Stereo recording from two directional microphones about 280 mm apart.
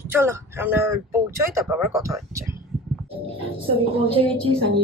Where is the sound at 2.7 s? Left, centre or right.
Centre.